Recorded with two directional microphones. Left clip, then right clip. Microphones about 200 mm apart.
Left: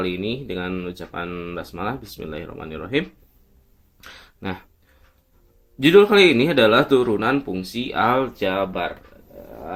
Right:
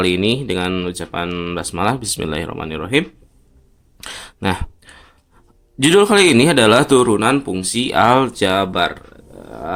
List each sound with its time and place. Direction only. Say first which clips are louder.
0.0 s speech: right 9 dB; 30° right (ahead or behind)
4.0 s a sound: right 11 dB; 25° right (ahead or behind)
5.8 s speech: right 1 dB; 35° right (ahead or behind)